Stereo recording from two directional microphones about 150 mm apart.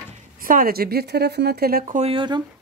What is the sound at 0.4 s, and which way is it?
Speech, 70° right (ahead or behind).